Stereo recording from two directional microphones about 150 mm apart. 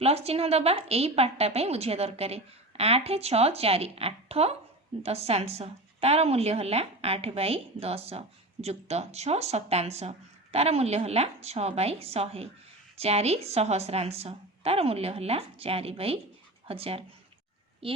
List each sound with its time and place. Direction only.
0.0 s a woman's voice: 40° right (ahead or behind)